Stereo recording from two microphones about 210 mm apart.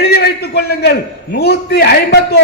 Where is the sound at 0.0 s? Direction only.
50° left (ahead or behind).